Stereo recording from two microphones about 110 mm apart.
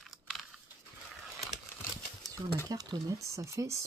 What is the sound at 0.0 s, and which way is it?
Typing, centre (ahead or behind).